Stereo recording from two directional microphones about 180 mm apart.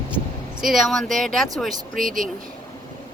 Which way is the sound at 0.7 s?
Centre (ahead or behind).